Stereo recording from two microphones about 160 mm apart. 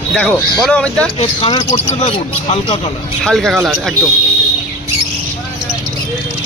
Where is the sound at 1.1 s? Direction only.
35° left (ahead or behind).